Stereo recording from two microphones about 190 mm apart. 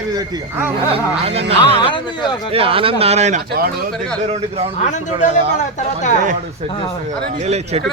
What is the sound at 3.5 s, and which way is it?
Speech, 55° right (ahead or behind).